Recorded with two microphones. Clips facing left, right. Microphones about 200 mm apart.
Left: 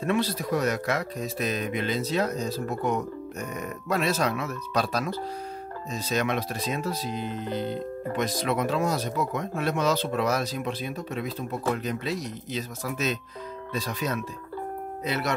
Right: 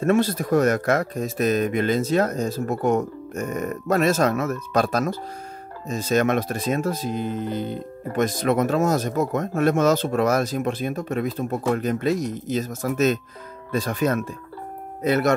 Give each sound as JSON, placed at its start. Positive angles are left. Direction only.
{"t": 0.0, "sound": "speech", "side_deg": -50}